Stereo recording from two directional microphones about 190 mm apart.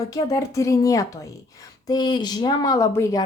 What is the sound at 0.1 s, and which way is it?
Speech, 20° left (ahead or behind).